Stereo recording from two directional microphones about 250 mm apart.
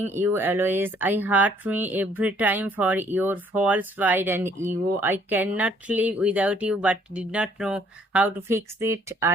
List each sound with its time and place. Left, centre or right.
0.0 s speech: centre